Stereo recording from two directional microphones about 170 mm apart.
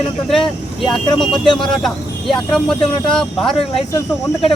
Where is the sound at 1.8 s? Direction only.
Centre (ahead or behind).